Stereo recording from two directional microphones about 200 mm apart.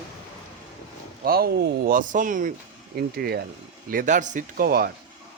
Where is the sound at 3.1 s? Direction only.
50° right (ahead or behind).